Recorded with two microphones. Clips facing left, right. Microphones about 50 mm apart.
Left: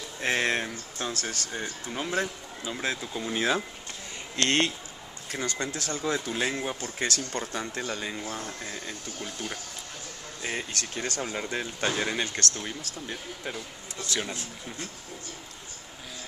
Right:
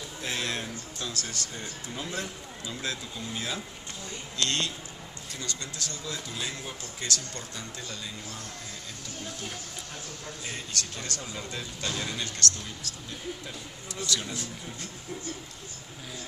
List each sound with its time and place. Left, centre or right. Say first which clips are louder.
0.2 s a sound: left 7 dB; left
1.2 s speech: left 4 dB; left
3.3 s speech: left 9 dB; left
4.4 s speech: left 5 dB; left
10.4 s speech: left 5 dB; left
14.0 s speech: even; left